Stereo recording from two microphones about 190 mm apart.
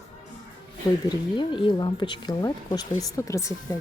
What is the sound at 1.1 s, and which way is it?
Speech, 25° left (ahead or behind).